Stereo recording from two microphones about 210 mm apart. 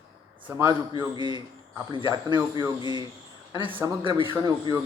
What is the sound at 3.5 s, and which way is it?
Speech, 25° right (ahead or behind).